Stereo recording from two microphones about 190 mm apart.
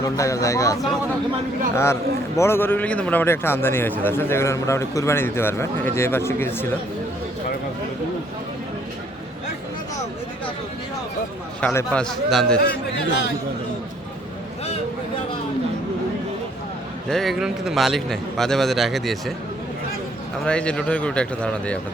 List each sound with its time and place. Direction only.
0.0 s speech: 15° left (ahead or behind)
11.6 s a man's voice: 10° left (ahead or behind)
17.1 s a man's voice: centre (ahead or behind)
20.4 s a man's voice: 5° left (ahead or behind)